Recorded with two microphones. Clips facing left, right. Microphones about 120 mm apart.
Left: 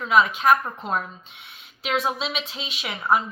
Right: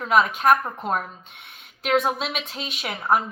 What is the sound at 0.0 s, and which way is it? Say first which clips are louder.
Speech: even; 50° right (ahead or behind).